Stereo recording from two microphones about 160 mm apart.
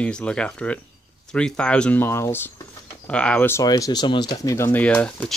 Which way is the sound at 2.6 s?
25° left (ahead or behind).